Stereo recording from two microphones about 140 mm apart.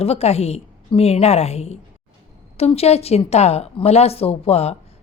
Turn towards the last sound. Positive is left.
turn(degrees=50)  # may be behind; listen again after turning